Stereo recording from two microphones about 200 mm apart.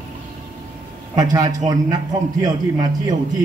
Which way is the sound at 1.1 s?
20° right (ahead or behind).